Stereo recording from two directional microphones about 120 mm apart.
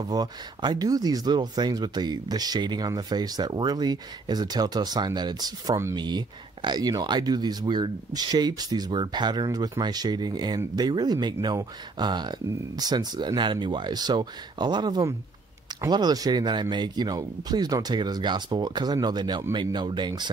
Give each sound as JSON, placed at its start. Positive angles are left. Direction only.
{"t": 0.1, "sound": "speech", "side_deg": -35}